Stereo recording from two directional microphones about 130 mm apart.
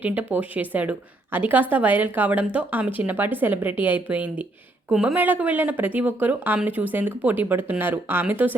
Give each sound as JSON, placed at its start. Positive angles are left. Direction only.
{"t": 0.0, "sound": "a woman's voice", "side_deg": -10}